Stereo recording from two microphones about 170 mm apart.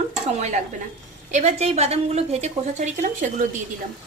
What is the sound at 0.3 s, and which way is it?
A woman's voice, 45° right (ahead or behind).